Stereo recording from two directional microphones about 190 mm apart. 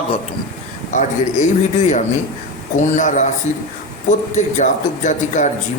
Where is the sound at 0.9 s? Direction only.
40° left (ahead or behind).